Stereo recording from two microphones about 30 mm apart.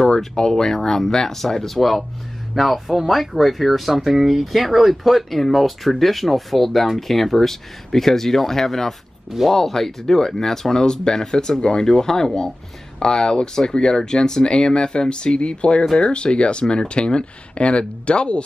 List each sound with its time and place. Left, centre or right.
0.4 s speech: centre; by 18.4 s left